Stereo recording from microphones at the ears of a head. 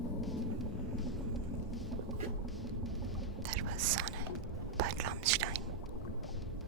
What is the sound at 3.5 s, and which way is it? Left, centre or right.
Whispering, right.